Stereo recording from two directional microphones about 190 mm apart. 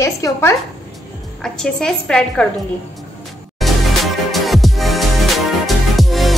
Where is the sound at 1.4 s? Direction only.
5° left (ahead or behind).